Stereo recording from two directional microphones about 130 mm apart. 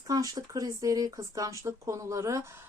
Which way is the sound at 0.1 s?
25° right (ahead or behind).